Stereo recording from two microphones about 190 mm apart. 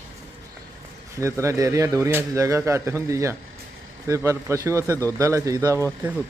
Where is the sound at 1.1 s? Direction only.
15° right (ahead or behind).